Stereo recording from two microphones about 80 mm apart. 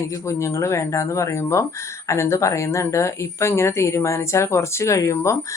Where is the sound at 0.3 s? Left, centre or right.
Left.